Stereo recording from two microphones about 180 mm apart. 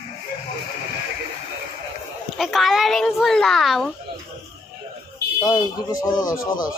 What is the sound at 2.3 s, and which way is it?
Speech, centre (ahead or behind).